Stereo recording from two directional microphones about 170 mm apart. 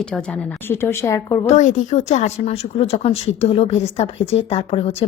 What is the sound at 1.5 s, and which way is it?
Speech, 45° left (ahead or behind).